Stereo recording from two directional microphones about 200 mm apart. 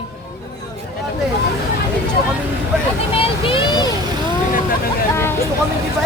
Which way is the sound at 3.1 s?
25° left (ahead or behind).